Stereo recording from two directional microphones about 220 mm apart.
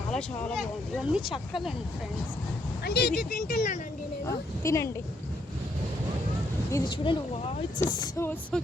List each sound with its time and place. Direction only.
0.1 s speech: centre (ahead or behind)
2.8 s speech: 45° left (ahead or behind)
4.3 s speech: 15° left (ahead or behind)
6.7 s speech: 15° left (ahead or behind)